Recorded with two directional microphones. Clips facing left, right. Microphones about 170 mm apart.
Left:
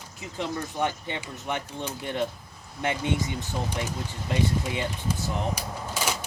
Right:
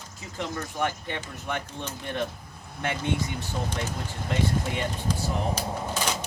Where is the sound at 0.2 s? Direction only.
20° left (ahead or behind).